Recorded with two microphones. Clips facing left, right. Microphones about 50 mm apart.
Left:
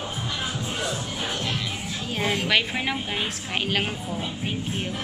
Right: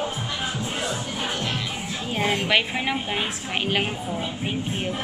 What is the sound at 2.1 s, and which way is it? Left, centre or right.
Speech, centre.